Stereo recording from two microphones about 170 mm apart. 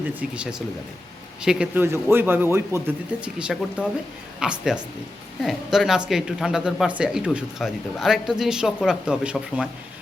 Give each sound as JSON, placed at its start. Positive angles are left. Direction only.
{"t": 1.4, "sound": "a man's voice", "side_deg": -5}